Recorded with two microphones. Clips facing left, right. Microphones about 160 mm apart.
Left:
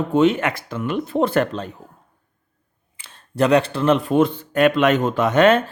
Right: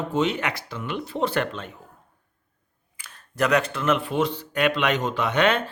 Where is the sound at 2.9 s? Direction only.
25° left (ahead or behind).